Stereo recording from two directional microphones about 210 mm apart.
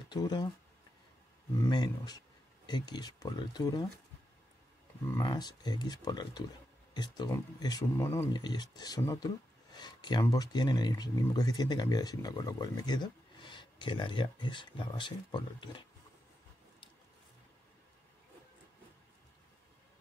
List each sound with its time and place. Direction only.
0.1 s speech: 20° left (ahead or behind)
1.6 s speech: 20° left (ahead or behind)
5.1 s speech: 20° left (ahead or behind)